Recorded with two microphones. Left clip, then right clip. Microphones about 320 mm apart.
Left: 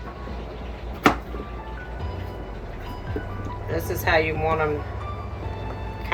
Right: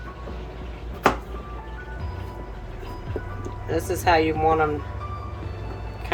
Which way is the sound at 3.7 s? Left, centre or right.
Right.